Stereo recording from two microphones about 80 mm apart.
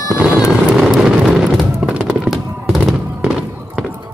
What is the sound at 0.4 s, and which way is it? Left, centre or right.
Vehicle, centre.